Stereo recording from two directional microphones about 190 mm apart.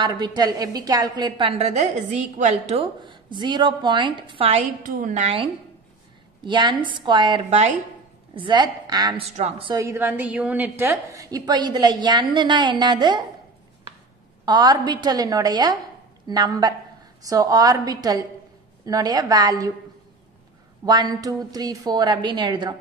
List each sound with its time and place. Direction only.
0.0 s a woman's voice: 20° right (ahead or behind)
4.8 s a woman's voice: 45° right (ahead or behind)
8.4 s a woman's voice: 25° right (ahead or behind)
9.8 s a woman's voice: 15° right (ahead or behind)
14.4 s a woman's voice: 20° right (ahead or behind)
20.8 s a woman's voice: 20° right (ahead or behind)